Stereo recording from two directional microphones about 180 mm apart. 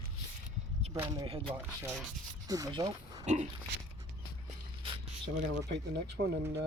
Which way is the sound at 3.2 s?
40° right (ahead or behind).